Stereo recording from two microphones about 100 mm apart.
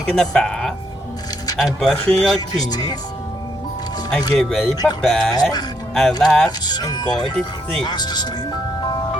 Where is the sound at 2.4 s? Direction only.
45° left (ahead or behind).